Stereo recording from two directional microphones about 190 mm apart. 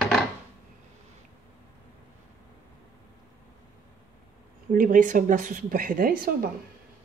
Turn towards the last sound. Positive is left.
turn(degrees=-50)  # may be behind; listen again after turning